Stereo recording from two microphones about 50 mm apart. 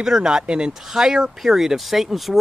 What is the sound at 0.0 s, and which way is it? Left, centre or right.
Speech, centre.